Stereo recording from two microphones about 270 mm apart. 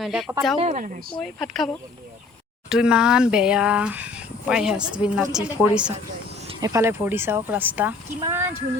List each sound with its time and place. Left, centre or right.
0.0 s speech: centre
0.6 s speech: right
1.2 s speech: centre